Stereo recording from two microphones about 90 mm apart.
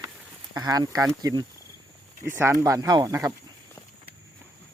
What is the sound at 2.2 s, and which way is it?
Speech, 30° right (ahead or behind).